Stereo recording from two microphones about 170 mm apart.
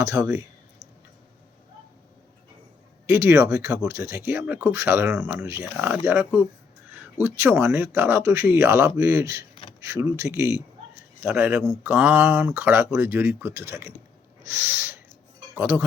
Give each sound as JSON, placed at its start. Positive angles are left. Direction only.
{"t": 0.0, "sound": "speech", "side_deg": -20}
{"t": 3.1, "sound": "speech", "side_deg": -15}
{"t": 14.4, "sound": "owl", "side_deg": -15}